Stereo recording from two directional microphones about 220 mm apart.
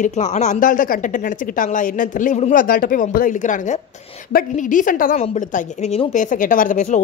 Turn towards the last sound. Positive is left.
turn(degrees=30)  # may be behind; listen again after turning